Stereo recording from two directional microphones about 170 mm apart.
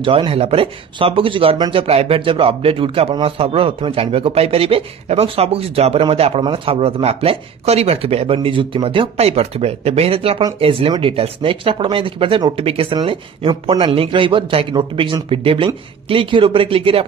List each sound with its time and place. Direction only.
0.0 s speech: 30° right (ahead or behind)